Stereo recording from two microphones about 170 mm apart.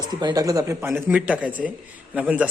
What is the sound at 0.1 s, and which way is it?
A man's voice, 25° right (ahead or behind).